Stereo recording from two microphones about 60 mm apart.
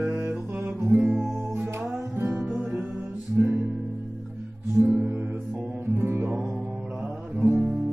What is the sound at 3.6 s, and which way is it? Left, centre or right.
Music, centre.